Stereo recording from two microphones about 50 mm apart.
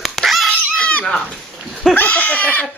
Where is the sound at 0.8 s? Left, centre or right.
Centre.